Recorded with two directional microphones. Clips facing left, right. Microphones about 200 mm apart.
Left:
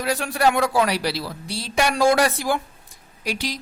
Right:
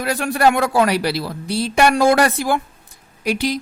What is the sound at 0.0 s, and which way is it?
A woman's voice, 55° right (ahead or behind).